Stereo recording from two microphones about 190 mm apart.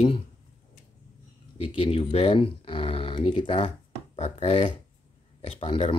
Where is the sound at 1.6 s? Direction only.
30° left (ahead or behind).